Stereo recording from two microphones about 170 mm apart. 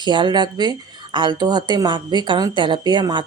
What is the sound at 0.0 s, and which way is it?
Speech, 25° right (ahead or behind).